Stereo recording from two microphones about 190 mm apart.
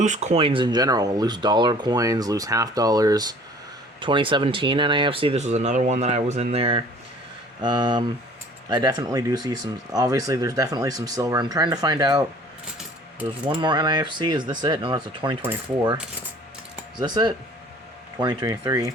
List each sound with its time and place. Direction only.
0.0 s speech: 40° right (ahead or behind); by 12.2 s 20° right (ahead or behind)
13.6 s speech: 25° right (ahead or behind)
17.0 s speech: 25° right (ahead or behind)